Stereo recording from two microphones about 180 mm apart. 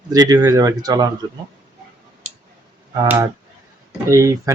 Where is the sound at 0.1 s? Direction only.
20° right (ahead or behind).